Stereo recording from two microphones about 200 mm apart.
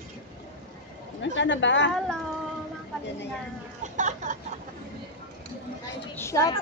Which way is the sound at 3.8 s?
35° right (ahead or behind).